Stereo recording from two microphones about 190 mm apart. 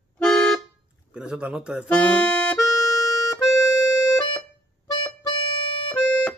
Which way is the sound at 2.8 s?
20° left (ahead or behind).